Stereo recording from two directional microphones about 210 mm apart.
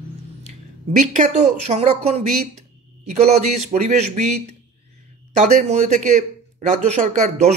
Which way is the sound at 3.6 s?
30° right (ahead or behind).